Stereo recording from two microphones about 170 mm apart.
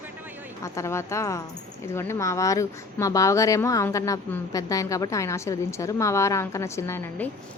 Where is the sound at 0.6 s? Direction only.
15° left (ahead or behind).